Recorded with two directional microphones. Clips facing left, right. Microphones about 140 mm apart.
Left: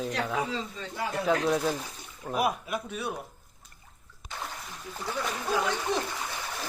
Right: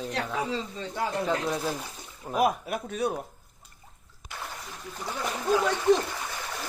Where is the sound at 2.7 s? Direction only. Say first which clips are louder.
Right 4 dB; 45° right (ahead or behind).